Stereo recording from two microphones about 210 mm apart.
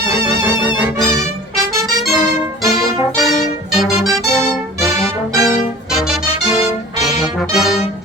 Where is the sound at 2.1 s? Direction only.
Centre (ahead or behind).